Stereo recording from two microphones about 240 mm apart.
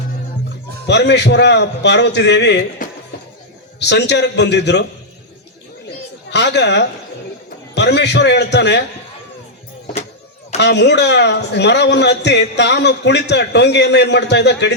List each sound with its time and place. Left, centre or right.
0.9 s a man's voice: left
6.3 s a man's voice: left
10.6 s a man's voice: left